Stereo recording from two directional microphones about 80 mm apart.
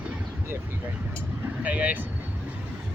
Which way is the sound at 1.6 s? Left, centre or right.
Centre.